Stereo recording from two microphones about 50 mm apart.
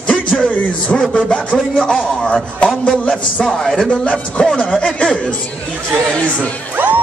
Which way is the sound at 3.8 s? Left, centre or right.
Left.